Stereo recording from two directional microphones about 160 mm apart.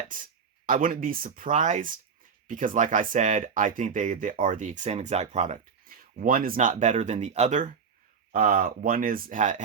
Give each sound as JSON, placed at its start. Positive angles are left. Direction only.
{"t": 0.1, "sound": "speech", "side_deg": -55}
{"t": 5.8, "sound": "speech", "side_deg": -65}
{"t": 8.3, "sound": "speech", "side_deg": -65}